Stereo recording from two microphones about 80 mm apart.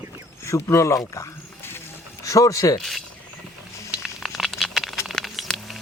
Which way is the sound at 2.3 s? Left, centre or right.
Left.